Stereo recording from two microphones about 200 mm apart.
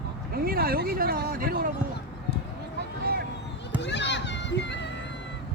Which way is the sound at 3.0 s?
50° right (ahead or behind).